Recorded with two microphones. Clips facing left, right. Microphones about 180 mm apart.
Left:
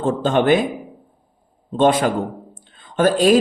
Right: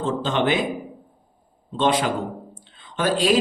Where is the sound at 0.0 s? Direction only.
50° left (ahead or behind).